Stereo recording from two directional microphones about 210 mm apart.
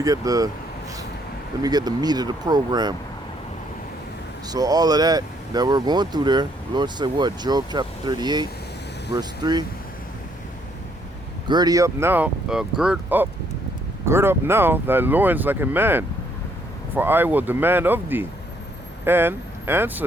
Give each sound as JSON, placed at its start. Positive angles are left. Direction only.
{"t": 0.0, "sound": "speech", "side_deg": -15}
{"t": 1.6, "sound": "speech", "side_deg": -20}
{"t": 4.4, "sound": "speech", "side_deg": -15}
{"t": 11.4, "sound": "speech", "side_deg": -20}